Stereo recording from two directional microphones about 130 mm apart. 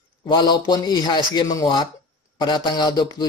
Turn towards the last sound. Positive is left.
turn(degrees=35)  # may be behind; listen again after turning